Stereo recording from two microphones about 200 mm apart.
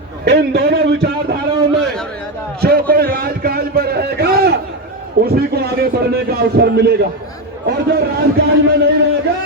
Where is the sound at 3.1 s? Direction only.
50° right (ahead or behind).